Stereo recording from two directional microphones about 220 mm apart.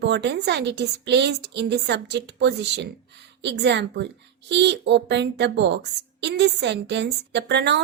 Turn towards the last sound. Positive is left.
turn(degrees=-50)  # may be behind; listen again after turning